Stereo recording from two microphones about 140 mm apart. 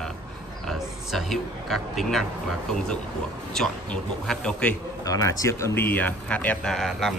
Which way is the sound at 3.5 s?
5° left (ahead or behind).